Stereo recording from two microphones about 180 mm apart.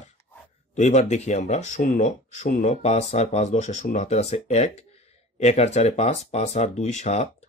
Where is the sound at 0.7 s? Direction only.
40° left (ahead or behind).